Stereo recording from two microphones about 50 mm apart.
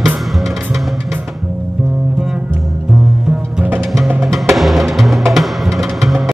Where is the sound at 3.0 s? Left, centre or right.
Centre.